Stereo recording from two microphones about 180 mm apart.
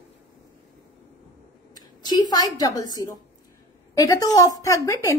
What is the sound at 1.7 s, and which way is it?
A woman's voice, 20° left (ahead or behind).